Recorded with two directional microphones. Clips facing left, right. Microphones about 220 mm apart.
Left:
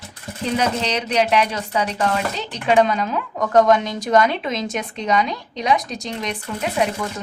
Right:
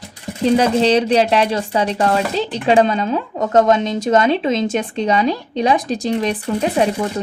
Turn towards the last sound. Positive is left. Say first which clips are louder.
# right 5 dB
turn(degrees=-30)  # may be behind; listen again after turning